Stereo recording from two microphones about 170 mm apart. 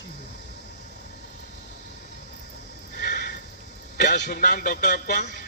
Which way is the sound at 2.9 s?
70° left (ahead or behind).